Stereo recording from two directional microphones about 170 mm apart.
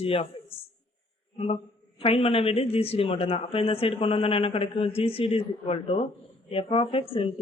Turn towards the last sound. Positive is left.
turn(degrees=30)  # may be behind; listen again after turning